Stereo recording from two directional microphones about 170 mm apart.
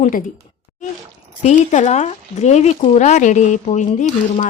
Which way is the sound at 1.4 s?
45° left (ahead or behind).